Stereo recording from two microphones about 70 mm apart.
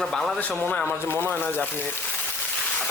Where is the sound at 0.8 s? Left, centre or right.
Right.